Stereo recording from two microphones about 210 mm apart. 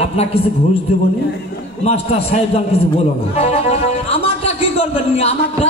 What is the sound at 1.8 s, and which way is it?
A man's voice, 30° left (ahead or behind).